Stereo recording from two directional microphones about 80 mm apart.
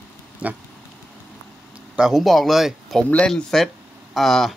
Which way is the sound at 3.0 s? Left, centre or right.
Centre.